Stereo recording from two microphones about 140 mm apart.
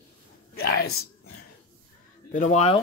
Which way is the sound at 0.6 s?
90° left.